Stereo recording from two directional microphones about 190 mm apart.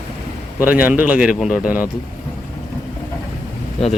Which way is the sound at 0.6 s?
10° right (ahead or behind).